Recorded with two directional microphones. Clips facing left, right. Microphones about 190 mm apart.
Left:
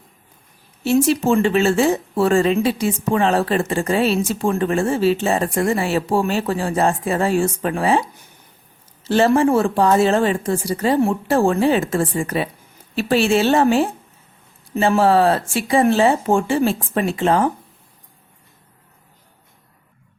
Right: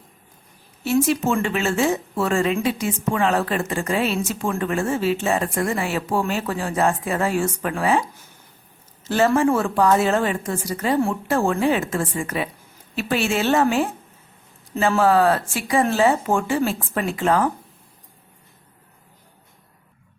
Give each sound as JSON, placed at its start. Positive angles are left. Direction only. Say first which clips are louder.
{"t": 1.0, "sound": "speech", "louder": "left 5 dB", "side_deg": 30}
{"t": 9.0, "sound": "speech", "louder": "left 3 dB", "side_deg": 30}